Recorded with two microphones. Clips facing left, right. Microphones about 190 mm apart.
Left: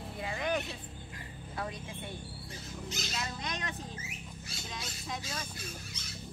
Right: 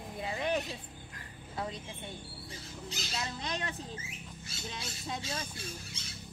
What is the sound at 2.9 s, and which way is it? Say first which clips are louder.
Speech: even; 30° right (ahead or behind).